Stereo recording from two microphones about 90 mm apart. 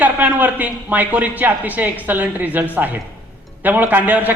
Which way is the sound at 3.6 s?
20° right (ahead or behind).